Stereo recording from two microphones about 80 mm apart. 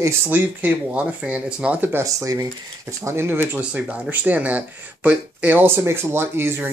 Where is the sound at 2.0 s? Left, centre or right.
Right.